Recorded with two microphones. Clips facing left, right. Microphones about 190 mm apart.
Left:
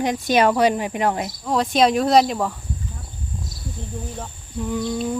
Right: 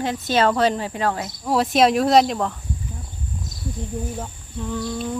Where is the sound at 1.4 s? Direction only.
5° right (ahead or behind).